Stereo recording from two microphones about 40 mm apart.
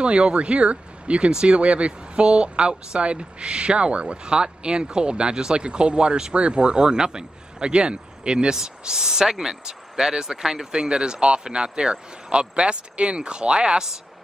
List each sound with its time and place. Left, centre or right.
0.0 s speech: right